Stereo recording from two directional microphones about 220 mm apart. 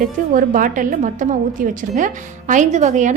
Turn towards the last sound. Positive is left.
turn(degrees=-35)  # may be behind; listen again after turning